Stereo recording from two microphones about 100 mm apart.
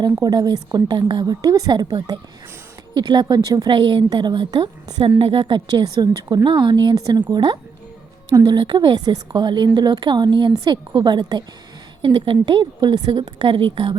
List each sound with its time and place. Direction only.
0.0 s a woman's voice: 45° right (ahead or behind)
5.0 s a woman's voice: 60° right (ahead or behind)